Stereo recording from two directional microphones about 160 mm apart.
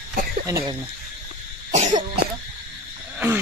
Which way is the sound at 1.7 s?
50° right (ahead or behind).